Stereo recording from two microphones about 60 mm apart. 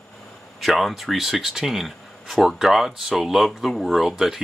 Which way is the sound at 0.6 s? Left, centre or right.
Centre.